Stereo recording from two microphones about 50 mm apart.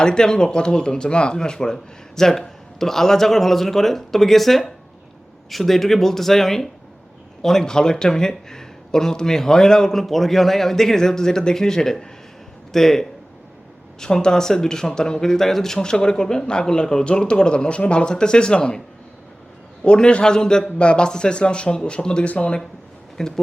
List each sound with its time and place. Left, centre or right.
0.0 s a man's voice: centre
19.8 s speech: left
23.2 s speech: centre